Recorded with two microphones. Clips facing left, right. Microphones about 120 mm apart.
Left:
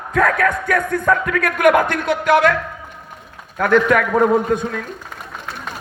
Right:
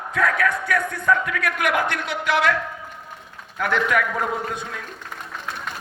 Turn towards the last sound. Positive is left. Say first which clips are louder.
# left 11 dB
turn(degrees=45)  # may be behind; listen again after turning